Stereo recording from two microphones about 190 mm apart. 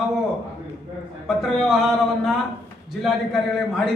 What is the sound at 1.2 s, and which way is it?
A man's voice, centre (ahead or behind).